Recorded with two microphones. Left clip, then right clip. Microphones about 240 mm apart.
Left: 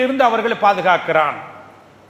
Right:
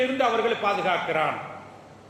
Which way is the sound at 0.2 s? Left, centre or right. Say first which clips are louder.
Left 8 dB; left.